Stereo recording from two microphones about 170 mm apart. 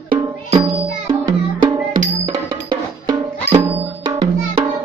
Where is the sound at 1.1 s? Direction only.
25° right (ahead or behind).